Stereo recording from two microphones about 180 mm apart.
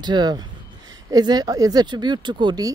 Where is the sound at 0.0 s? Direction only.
25° right (ahead or behind).